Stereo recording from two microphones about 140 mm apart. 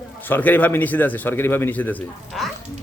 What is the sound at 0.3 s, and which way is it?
A man's voice, 15° left (ahead or behind).